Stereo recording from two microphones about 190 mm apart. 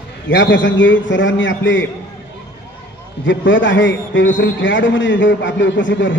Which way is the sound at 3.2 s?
80° left.